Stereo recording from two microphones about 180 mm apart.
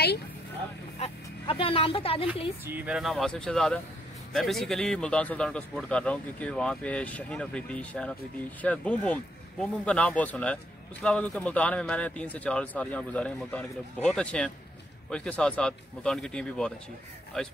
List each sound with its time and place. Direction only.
0.9 s speech: 30° left (ahead or behind)
2.6 s a man's voice: 10° right (ahead or behind)